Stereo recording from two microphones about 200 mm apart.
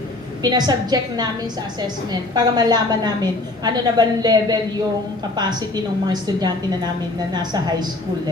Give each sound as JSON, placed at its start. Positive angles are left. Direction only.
{"t": 0.4, "sound": "a woman's voice", "side_deg": -20}
{"t": 2.3, "sound": "a woman's voice", "side_deg": -20}